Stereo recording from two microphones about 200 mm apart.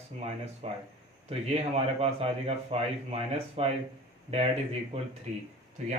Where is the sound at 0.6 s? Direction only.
30° right (ahead or behind).